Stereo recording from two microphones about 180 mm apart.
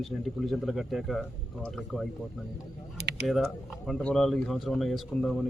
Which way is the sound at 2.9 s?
65° right (ahead or behind).